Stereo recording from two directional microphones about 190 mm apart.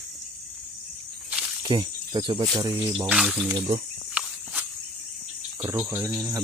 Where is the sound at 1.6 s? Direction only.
25° right (ahead or behind).